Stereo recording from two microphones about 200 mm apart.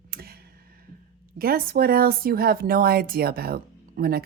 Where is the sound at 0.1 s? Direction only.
50° right (ahead or behind).